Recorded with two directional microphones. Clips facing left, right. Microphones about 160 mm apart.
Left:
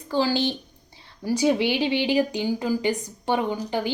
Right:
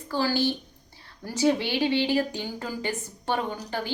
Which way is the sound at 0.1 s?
15° left (ahead or behind).